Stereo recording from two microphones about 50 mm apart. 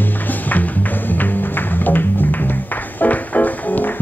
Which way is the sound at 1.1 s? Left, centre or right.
Left.